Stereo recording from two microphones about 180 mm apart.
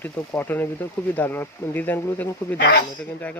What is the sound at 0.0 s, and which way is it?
Speech, 10° left (ahead or behind).